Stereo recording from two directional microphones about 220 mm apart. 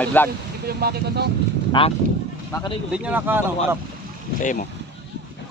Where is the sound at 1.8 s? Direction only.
25° left (ahead or behind).